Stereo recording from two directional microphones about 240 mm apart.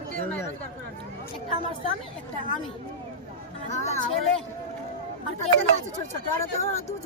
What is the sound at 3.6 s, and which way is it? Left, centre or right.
Speech, left.